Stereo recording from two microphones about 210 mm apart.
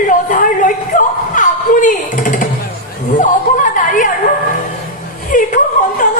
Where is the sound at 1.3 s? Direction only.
40° left (ahead or behind).